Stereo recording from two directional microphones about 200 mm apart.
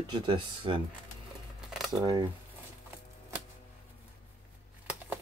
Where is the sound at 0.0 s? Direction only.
25° right (ahead or behind).